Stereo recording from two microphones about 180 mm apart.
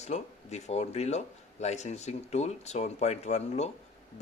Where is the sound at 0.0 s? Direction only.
40° left (ahead or behind).